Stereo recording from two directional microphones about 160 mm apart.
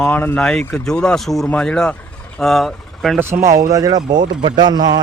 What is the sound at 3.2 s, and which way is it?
Speech, 15° right (ahead or behind).